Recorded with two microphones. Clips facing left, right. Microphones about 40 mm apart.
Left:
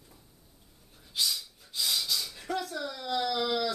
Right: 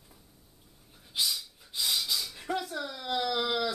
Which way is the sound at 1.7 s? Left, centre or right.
Centre.